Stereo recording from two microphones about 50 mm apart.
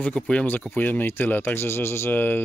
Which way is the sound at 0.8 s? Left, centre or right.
Left.